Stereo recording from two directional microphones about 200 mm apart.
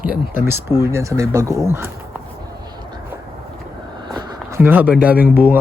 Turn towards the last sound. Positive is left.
turn(degrees=-10)  # may be behind; listen again after turning